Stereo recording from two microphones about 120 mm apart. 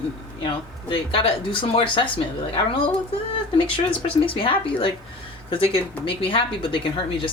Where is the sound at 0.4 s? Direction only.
45° left (ahead or behind).